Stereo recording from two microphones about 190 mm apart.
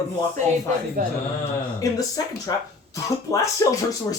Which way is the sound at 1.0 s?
45° right (ahead or behind).